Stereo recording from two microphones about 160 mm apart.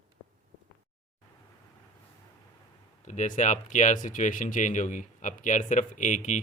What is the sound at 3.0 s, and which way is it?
Speech, 50° left (ahead or behind).